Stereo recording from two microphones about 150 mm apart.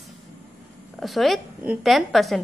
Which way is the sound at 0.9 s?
Centre (ahead or behind).